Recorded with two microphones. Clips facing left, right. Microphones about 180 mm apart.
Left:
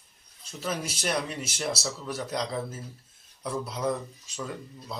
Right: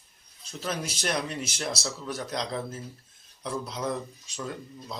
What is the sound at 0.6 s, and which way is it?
A man's voice, 5° left (ahead or behind).